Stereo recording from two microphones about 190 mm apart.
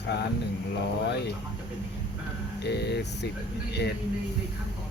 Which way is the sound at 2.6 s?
60° left (ahead or behind).